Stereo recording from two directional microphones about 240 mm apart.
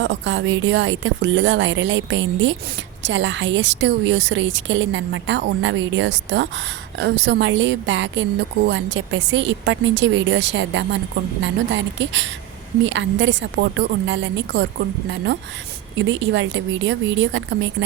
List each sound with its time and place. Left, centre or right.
0.0 s a woman's voice: right